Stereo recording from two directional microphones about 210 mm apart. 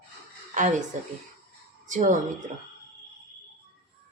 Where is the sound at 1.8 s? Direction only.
35° right (ahead or behind).